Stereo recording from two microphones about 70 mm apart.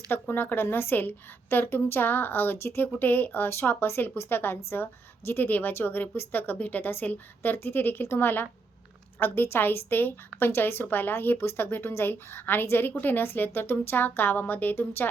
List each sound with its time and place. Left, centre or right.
0.1 s a woman's voice: left